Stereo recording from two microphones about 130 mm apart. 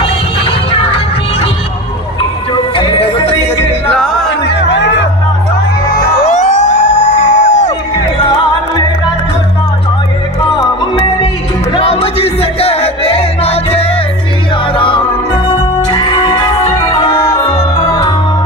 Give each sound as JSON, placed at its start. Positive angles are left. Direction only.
{"t": 0.0, "sound": "music", "side_deg": 50}
{"t": 2.7, "sound": "music", "side_deg": 45}
{"t": 3.9, "sound": "music", "side_deg": 5}
{"t": 6.2, "sound": "a sound", "side_deg": 65}
{"t": 11.7, "sound": "music", "side_deg": 50}